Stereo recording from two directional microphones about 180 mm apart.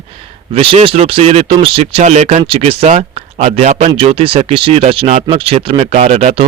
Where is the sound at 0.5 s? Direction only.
30° right (ahead or behind).